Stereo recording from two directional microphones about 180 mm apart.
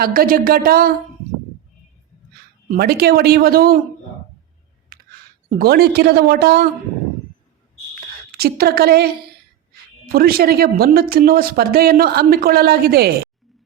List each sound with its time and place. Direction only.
0.0 s speech: 55° right (ahead or behind)
2.6 s speech: 60° right (ahead or behind)
4.9 s computer keyboard: 55° right (ahead or behind)
5.5 s speech: 55° right (ahead or behind)
8.3 s speech: 60° right (ahead or behind)